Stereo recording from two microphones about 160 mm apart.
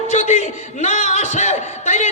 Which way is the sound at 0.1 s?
45° left (ahead or behind).